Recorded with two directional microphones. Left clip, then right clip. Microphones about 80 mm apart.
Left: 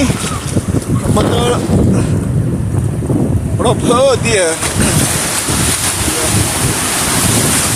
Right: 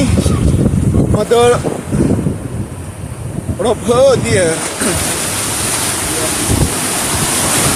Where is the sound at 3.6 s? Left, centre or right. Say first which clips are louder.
Right 1 dB; right.